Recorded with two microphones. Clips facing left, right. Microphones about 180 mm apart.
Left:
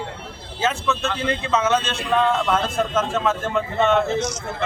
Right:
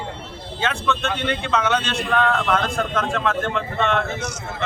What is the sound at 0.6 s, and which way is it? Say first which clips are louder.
Speech: left 1 dB; 5° left (ahead or behind).